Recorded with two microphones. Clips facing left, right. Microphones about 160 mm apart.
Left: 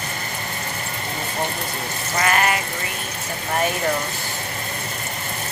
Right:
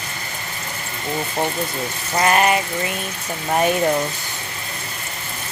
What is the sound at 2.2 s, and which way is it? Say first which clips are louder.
Water: right 4 dB; 25° right (ahead or behind).